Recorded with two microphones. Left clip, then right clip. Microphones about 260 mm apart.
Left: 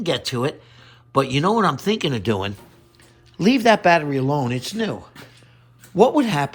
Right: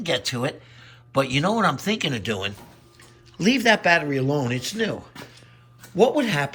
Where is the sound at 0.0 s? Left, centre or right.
Centre.